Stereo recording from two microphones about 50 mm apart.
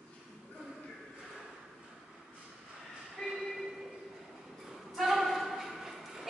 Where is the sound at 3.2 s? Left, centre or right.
Centre.